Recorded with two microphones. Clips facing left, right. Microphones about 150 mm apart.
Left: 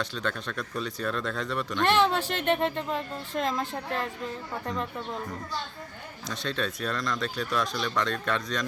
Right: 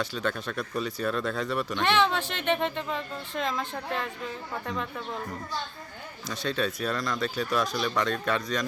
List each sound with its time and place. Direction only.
0.0 s speech: 5° right (ahead or behind)
2.1 s speech: 40° left (ahead or behind)
2.5 s speech: centre (ahead or behind)
4.6 s speech: centre (ahead or behind)
6.2 s speech: centre (ahead or behind)